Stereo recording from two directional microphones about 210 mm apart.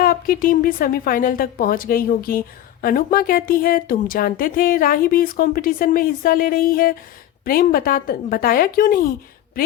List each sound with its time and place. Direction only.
0.0 s speech: 45° left (ahead or behind)